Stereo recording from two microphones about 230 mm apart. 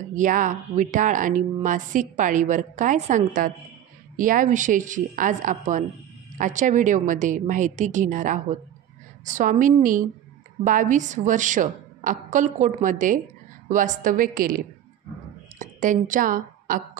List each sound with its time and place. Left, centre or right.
0.1 s a woman's voice: right
15.6 s a woman's voice: right